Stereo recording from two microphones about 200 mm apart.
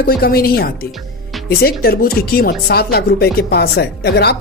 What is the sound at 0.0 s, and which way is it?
Speech, 50° left (ahead or behind).